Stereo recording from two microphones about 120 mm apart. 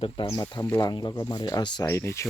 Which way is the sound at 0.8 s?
35° left (ahead or behind).